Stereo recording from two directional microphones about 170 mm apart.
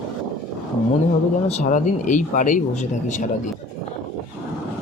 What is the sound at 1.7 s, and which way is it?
Speech, 45° left (ahead or behind).